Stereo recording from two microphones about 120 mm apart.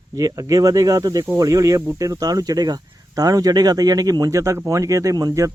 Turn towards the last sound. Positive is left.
turn(degrees=-30)  # may be behind; listen again after turning